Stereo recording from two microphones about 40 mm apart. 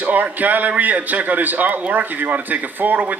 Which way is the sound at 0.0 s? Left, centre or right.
Right.